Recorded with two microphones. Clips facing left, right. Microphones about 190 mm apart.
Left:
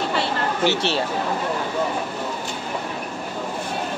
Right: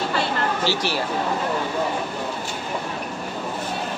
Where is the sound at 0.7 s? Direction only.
25° left (ahead or behind).